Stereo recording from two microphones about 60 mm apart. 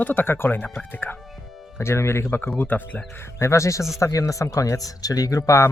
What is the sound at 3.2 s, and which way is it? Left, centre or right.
A man's voice, left.